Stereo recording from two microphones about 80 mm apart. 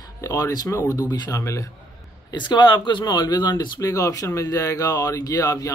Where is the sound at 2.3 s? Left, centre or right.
Left.